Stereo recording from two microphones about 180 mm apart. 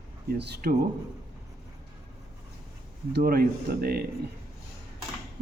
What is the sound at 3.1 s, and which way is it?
Speech, 60° right (ahead or behind).